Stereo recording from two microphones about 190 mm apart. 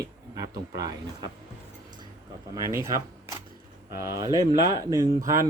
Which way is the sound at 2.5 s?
15° right (ahead or behind).